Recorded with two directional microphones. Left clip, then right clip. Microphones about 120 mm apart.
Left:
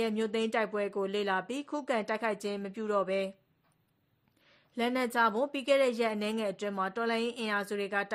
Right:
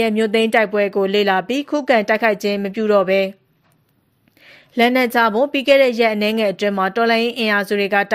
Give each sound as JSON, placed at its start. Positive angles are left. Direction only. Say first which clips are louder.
{"t": 0.0, "sound": "speech", "louder": "right 15 dB", "side_deg": -30}
{"t": 4.5, "sound": "a woman's voice", "louder": "right 17 dB", "side_deg": -30}